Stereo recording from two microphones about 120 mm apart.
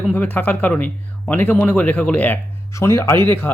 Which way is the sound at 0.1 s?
15° left (ahead or behind).